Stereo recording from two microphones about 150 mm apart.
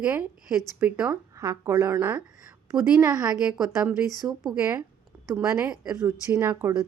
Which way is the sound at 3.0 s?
25° right (ahead or behind).